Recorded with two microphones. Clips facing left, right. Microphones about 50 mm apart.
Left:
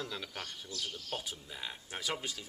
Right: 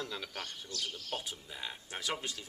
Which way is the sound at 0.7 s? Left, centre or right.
Right.